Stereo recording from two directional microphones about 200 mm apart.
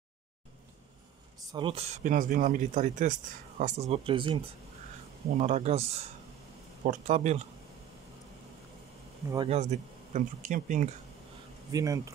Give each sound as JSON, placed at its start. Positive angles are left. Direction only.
{"t": 1.5, "sound": "speech", "side_deg": -25}
{"t": 9.5, "sound": "speech", "side_deg": -35}
{"t": 11.7, "sound": "speech", "side_deg": -15}